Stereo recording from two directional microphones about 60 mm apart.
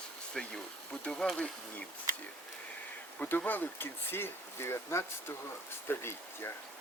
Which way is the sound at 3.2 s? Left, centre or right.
Left.